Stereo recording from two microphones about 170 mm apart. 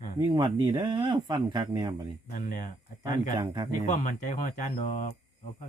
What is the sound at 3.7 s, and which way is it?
Speech, 45° left (ahead or behind).